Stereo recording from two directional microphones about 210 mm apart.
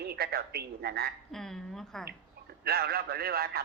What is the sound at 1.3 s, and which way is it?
Speech, centre (ahead or behind).